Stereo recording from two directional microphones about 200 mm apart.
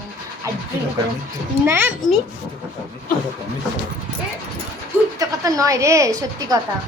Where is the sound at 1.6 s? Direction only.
10° right (ahead or behind).